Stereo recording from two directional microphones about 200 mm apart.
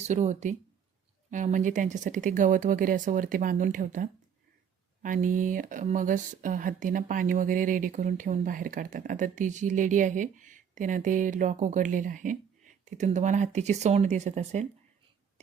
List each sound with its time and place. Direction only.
0.0 s speech: 35° right (ahead or behind)